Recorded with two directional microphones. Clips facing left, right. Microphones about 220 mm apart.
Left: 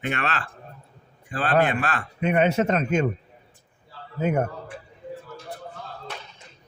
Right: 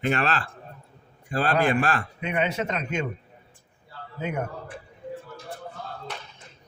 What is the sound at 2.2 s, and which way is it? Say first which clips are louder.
Speech: left 8 dB; 45° left (ahead or behind).